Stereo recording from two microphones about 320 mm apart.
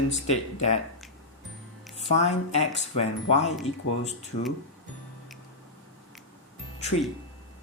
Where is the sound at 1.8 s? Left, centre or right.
Centre.